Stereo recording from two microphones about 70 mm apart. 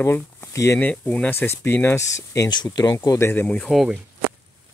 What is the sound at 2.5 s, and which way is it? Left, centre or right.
Speech, left.